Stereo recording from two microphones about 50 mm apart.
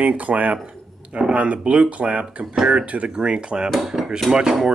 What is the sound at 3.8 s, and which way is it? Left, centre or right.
Dishes, centre.